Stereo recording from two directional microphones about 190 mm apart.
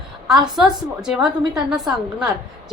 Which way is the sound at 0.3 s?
Centre (ahead or behind).